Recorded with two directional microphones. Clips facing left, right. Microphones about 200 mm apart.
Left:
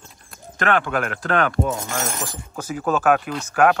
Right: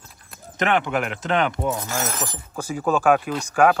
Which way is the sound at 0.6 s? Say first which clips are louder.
Even; 20° right (ahead or behind).